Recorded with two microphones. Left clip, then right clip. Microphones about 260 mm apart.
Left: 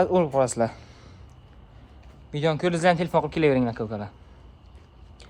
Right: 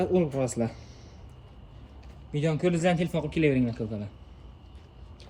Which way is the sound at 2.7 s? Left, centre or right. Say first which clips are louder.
Left 5 dB; centre.